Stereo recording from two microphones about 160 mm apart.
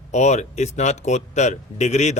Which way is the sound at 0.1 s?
45° left (ahead or behind).